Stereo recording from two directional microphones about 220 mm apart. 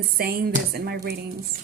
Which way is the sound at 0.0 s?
45° right (ahead or behind).